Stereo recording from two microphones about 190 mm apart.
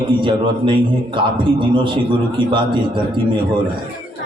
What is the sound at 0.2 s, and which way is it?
A man's voice, 25° right (ahead or behind).